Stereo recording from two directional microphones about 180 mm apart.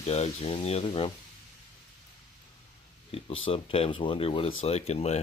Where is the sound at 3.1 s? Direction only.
35° left (ahead or behind).